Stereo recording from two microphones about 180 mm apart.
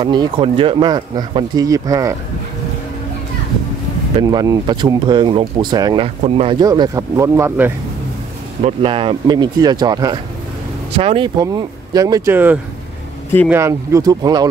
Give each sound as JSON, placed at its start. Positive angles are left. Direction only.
{"t": 0.0, "sound": "speech", "side_deg": -25}
{"t": 4.2, "sound": "speech", "side_deg": -20}
{"t": 8.6, "sound": "speech", "side_deg": -30}